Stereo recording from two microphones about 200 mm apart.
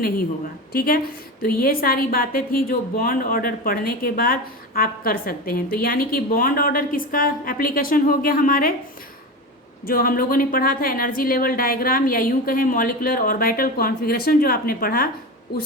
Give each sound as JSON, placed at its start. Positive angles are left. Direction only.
{"t": 0.7, "sound": "a woman's voice", "side_deg": 45}
{"t": 9.8, "sound": "a woman's voice", "side_deg": 45}